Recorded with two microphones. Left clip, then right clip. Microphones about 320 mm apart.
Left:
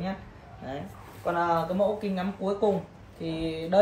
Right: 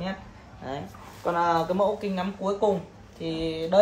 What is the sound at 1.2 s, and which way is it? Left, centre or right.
Speech, right.